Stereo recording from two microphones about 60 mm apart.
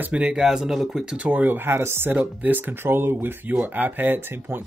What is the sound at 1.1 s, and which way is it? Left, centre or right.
Speech, right.